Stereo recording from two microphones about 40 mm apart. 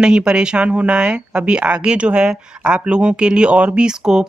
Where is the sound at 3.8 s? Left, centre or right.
Centre.